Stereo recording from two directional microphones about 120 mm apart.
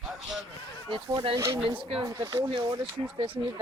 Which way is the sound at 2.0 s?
30° right (ahead or behind).